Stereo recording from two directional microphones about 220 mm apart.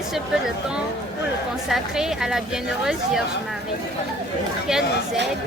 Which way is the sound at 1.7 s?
Centre (ahead or behind).